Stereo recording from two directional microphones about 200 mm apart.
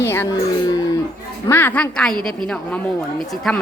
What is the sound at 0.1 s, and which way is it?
A woman's voice, 15° left (ahead or behind).